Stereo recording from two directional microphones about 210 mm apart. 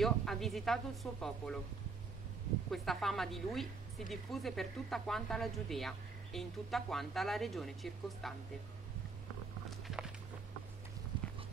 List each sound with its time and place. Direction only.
0.0 s speech: centre (ahead or behind)
2.7 s speech: centre (ahead or behind)
9.8 s music: 5° right (ahead or behind)
11.1 s a sound: 20° right (ahead or behind)